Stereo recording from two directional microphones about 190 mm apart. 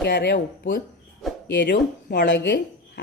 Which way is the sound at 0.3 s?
45° left (ahead or behind).